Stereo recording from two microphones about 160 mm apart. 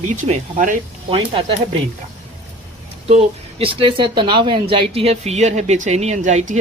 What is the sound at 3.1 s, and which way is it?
Speech, 40° right (ahead or behind).